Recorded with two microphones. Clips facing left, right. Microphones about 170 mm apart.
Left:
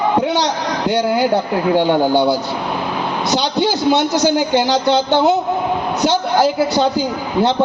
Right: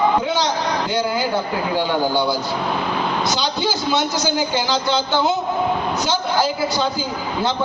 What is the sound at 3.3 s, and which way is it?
A man's voice, 65° left (ahead or behind).